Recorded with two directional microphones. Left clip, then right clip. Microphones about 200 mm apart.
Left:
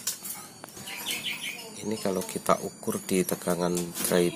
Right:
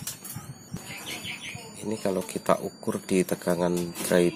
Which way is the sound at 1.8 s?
5° right (ahead or behind).